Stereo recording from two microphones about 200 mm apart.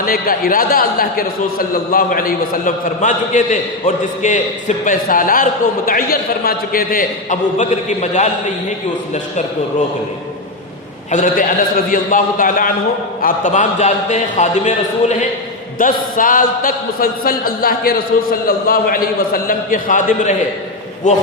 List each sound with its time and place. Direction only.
0.0 s a man's voice: 45° left (ahead or behind)
11.1 s a man's voice: 40° left (ahead or behind)